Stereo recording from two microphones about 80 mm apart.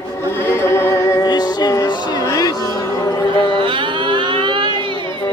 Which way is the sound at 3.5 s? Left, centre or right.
Right.